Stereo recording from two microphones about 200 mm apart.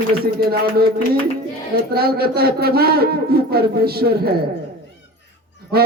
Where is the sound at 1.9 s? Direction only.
50° right (ahead or behind).